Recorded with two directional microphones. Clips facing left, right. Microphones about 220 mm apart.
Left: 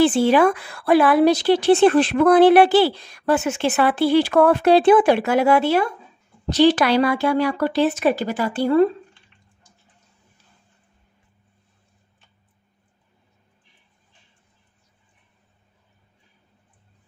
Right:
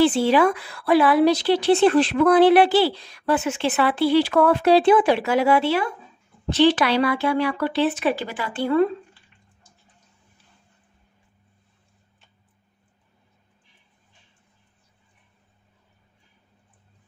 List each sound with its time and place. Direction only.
0.0 s speech: 50° left (ahead or behind)